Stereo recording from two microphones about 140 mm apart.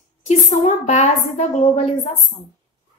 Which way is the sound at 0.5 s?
60° left (ahead or behind).